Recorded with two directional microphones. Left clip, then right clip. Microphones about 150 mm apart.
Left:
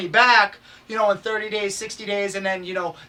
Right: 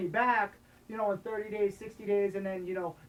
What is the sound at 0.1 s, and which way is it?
Speech, 25° left (ahead or behind).